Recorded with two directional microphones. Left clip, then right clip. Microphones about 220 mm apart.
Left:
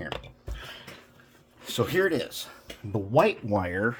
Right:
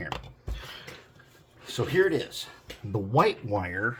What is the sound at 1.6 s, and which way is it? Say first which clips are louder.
Speech: even; 45° left (ahead or behind).